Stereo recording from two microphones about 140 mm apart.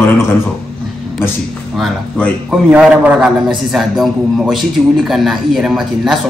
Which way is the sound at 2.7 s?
10° right (ahead or behind).